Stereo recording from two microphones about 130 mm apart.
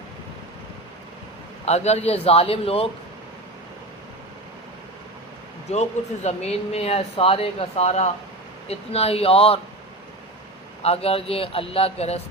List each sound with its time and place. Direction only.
1.6 s speech: 55° left (ahead or behind)
5.7 s speech: 55° left (ahead or behind)
10.8 s speech: 50° left (ahead or behind)